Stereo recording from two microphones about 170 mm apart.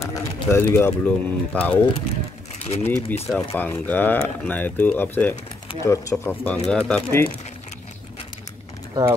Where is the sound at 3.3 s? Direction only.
15° left (ahead or behind).